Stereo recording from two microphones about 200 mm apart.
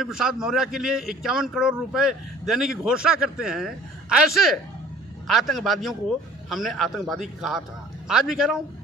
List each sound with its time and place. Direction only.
0.0 s a man's voice: centre (ahead or behind)